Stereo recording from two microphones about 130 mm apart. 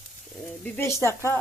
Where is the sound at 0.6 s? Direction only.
15° left (ahead or behind).